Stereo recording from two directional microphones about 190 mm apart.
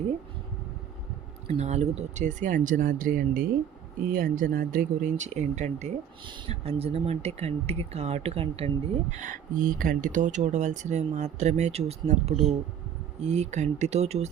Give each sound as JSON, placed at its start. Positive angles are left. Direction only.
{"t": 1.5, "sound": "speech", "side_deg": -35}